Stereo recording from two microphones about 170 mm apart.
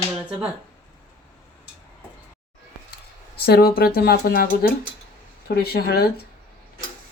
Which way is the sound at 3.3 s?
70° left (ahead or behind).